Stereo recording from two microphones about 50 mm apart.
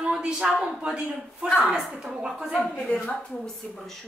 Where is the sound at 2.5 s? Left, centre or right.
Centre.